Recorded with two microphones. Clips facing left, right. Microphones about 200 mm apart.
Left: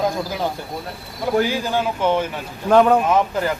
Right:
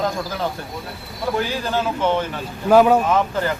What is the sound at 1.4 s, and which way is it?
Speech, 15° left (ahead or behind).